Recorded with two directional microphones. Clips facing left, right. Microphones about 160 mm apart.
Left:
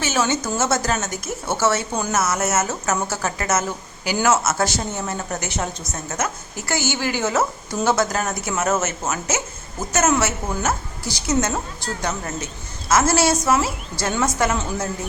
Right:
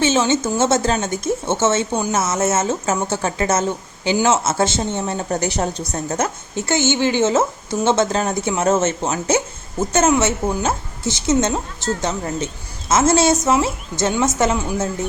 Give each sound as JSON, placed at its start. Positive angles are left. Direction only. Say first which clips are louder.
{"t": 0.0, "sound": "speech", "louder": "right 5 dB", "side_deg": -25}
{"t": 1.9, "sound": "speech", "louder": "right 4 dB", "side_deg": -10}
{"t": 2.1, "sound": "speech", "louder": "right 1 dB", "side_deg": -25}